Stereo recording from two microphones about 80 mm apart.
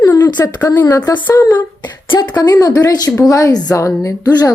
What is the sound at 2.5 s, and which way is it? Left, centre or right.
A woman's voice, left.